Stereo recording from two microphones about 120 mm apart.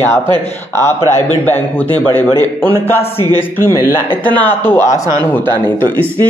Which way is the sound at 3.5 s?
20° left (ahead or behind).